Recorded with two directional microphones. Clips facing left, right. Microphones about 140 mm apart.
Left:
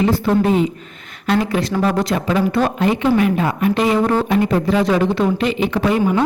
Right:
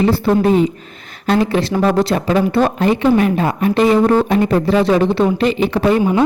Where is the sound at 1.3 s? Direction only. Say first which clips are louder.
Right 3 dB; 30° right (ahead or behind).